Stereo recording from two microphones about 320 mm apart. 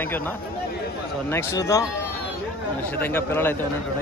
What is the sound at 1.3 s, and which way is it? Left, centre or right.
Speech, centre.